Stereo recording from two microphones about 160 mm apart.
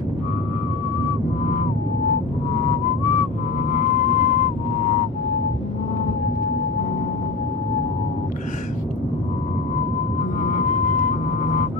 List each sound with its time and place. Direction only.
1.4 s vehicle: 45° left (ahead or behind)
2.6 s whistling: 50° left (ahead or behind)
3.7 s music: 55° left (ahead or behind)
10.4 s music: 55° left (ahead or behind)